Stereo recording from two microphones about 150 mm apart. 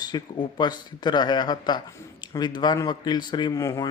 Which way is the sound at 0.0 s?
30° left (ahead or behind).